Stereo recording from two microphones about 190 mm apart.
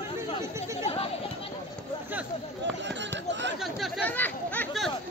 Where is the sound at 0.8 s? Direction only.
30° left (ahead or behind).